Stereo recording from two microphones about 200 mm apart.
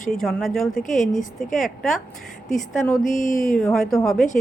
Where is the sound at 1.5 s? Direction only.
Centre (ahead or behind).